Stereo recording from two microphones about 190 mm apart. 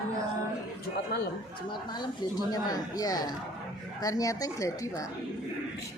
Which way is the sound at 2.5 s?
20° left (ahead or behind).